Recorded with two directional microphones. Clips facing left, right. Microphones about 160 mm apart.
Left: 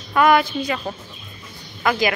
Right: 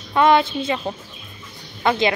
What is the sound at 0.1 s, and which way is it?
A woman's voice, 25° right (ahead or behind).